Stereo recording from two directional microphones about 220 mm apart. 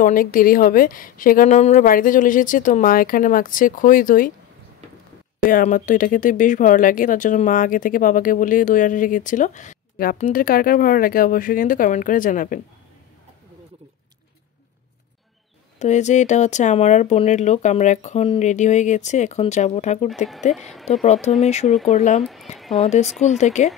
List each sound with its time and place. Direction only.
0.0 s speech: 40° left (ahead or behind)
5.5 s speech: 40° left (ahead or behind)
15.8 s speech: 30° left (ahead or behind)
22.2 s a sound: centre (ahead or behind)
22.8 s speech: 30° left (ahead or behind)